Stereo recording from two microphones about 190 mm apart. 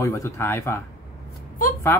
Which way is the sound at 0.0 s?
15° left (ahead or behind).